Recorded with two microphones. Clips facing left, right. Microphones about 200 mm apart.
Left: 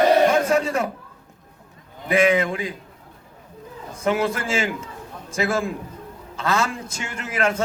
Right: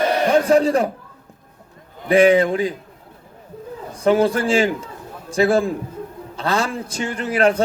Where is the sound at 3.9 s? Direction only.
35° right (ahead or behind).